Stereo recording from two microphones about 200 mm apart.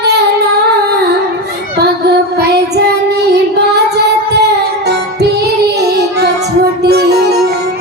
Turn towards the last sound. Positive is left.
turn(degrees=-55)  # may be behind; listen again after turning